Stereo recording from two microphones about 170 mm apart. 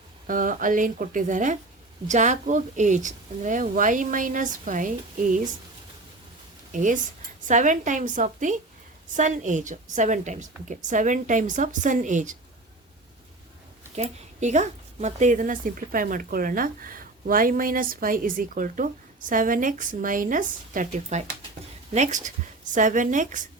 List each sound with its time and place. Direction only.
0.3 s a woman's voice: 50° right (ahead or behind)
6.7 s a woman's voice: 50° right (ahead or behind)
13.9 s a woman's voice: 40° right (ahead or behind)